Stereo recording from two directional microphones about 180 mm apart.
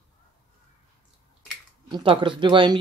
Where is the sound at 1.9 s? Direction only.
25° right (ahead or behind).